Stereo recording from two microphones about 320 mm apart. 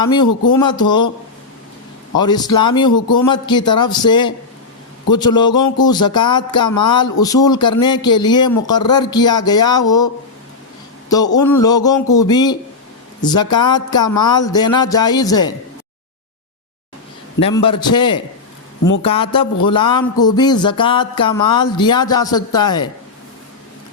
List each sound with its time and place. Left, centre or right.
0.0 s speech: centre
2.1 s speech: centre
11.1 s speech: centre
17.4 s speech: centre